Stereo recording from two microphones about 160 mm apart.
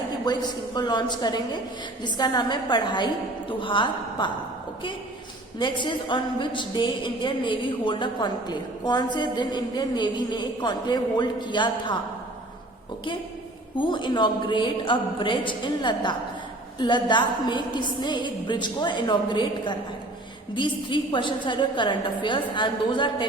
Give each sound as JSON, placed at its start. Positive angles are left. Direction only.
{"t": 0.3, "sound": "a woman's voice", "side_deg": 25}
{"t": 5.5, "sound": "a woman's voice", "side_deg": 30}
{"t": 13.7, "sound": "a woman's voice", "side_deg": 30}